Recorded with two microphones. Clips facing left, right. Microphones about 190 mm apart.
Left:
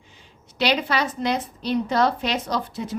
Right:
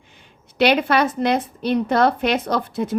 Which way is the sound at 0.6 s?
55° right (ahead or behind).